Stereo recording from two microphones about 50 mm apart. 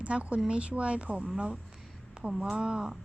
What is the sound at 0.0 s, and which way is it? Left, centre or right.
A woman's voice, right.